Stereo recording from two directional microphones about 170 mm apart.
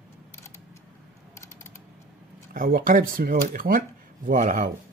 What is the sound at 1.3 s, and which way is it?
Typing, 15° left (ahead or behind).